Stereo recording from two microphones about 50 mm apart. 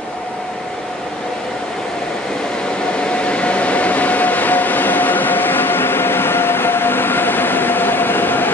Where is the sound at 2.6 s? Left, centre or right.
Centre.